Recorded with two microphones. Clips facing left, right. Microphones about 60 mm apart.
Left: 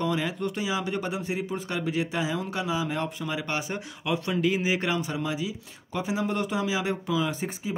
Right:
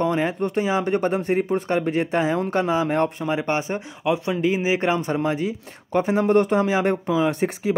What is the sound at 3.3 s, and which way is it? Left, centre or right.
Speech, right.